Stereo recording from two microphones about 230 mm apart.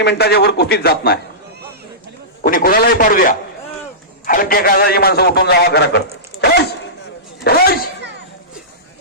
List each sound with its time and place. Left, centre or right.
0.0 s a man's voice: left
2.5 s a man's voice: left
7.4 s a man's voice: left